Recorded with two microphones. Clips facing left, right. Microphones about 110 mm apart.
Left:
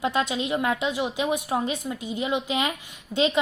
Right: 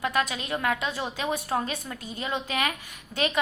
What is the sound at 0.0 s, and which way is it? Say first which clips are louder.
A woman's voice: left 3 dB; 25° left (ahead or behind).